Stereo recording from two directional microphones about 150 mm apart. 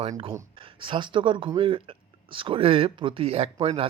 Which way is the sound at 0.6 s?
35° right (ahead or behind).